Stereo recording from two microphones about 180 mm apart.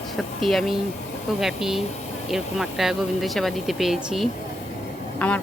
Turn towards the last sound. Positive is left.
turn(degrees=10)  # may be behind; listen again after turning